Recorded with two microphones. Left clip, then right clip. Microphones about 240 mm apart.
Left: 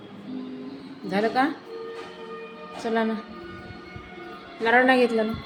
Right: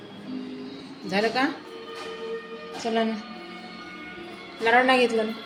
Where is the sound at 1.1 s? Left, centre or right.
Centre.